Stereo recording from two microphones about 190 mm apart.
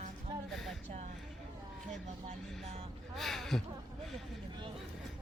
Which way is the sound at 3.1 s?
Centre (ahead or behind).